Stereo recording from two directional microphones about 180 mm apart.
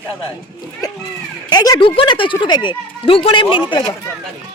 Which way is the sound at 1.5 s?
20° left (ahead or behind).